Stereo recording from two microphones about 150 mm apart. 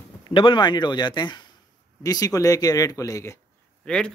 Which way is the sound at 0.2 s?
35° left (ahead or behind).